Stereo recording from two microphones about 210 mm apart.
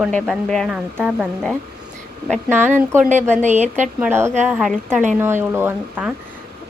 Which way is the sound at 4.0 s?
10° right (ahead or behind).